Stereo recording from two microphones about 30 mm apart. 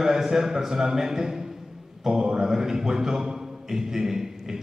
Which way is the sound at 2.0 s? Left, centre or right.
Right.